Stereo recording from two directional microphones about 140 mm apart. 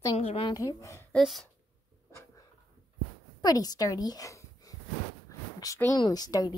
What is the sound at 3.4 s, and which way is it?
A woman's voice, 25° left (ahead or behind).